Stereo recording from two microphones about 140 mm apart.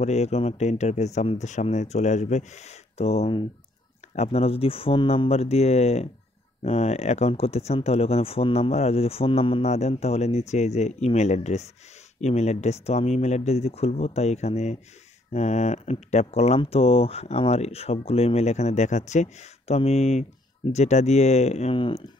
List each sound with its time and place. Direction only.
0.0 s speech: 50° left (ahead or behind)